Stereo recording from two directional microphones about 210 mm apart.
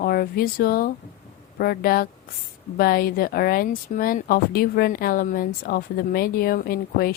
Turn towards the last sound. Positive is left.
turn(degrees=45)  # may be behind; listen again after turning